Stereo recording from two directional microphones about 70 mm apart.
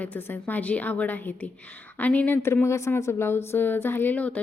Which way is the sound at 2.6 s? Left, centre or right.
Left.